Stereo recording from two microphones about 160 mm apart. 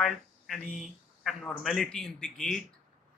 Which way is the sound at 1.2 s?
Centre (ahead or behind).